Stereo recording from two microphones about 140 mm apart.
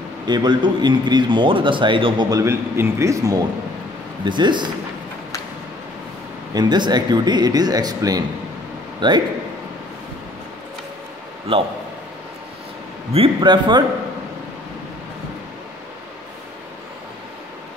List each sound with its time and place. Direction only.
0.3 s a man's voice: 30° right (ahead or behind)
2.4 s speech: 20° right (ahead or behind)
4.2 s a man's voice: 35° right (ahead or behind)
6.5 s a man's voice: 30° right (ahead or behind)
11.5 s a man's voice: 40° right (ahead or behind)
13.1 s a man's voice: 40° right (ahead or behind)